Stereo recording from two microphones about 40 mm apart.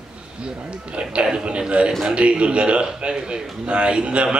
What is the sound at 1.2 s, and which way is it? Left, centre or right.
Speech, right.